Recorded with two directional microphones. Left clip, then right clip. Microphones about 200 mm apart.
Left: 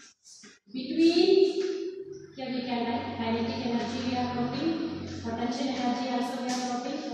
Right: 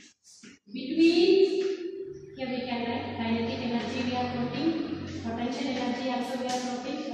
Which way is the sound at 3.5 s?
Centre (ahead or behind).